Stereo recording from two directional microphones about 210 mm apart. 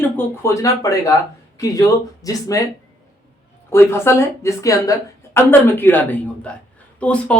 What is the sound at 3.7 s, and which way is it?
Speech, 10° left (ahead or behind).